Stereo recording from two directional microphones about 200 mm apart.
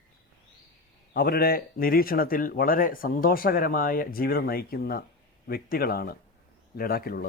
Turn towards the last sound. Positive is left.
turn(degrees=45)  # may be behind; listen again after turning